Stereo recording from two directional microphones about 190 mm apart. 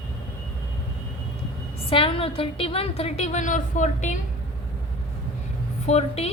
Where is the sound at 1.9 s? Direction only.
30° left (ahead or behind).